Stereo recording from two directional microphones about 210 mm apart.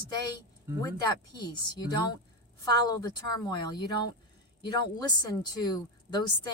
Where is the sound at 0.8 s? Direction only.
20° left (ahead or behind).